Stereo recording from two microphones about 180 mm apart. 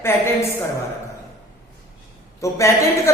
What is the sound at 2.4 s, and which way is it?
Speech, 15° left (ahead or behind).